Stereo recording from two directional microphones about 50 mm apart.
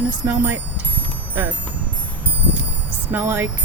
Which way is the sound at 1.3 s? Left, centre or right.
Right.